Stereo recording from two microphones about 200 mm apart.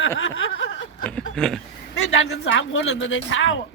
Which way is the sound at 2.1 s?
70° left (ahead or behind).